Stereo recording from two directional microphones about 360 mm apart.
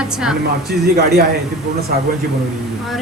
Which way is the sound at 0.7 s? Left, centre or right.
Right.